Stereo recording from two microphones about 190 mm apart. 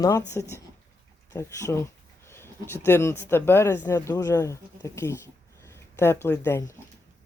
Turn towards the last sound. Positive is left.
turn(degrees=15)  # may be behind; listen again after turning